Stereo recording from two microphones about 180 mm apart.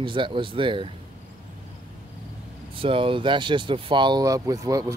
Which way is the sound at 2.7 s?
30° right (ahead or behind).